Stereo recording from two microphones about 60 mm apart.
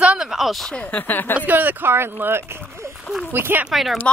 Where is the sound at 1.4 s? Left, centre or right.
Right.